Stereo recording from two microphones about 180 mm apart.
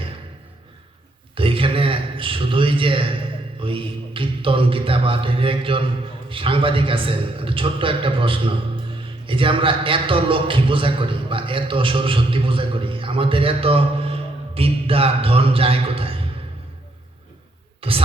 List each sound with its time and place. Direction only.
1.4 s a man's voice: 30° right (ahead or behind)
17.7 s speech: 30° right (ahead or behind)